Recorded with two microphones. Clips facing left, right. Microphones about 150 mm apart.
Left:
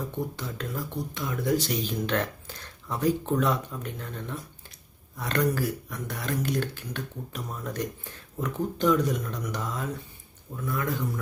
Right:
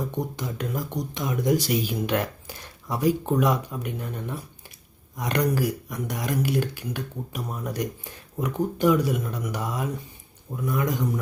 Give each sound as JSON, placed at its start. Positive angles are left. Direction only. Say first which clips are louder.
{"t": 0.0, "sound": "speech", "louder": "right 3 dB", "side_deg": -15}